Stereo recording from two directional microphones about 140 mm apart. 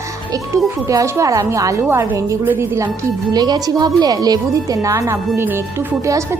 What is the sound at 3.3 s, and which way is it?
Speech, 30° right (ahead or behind).